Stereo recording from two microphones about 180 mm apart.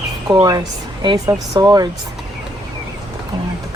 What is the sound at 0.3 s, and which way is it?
Speech, 25° right (ahead or behind).